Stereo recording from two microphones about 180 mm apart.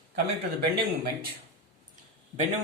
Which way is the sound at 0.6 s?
60° right (ahead or behind).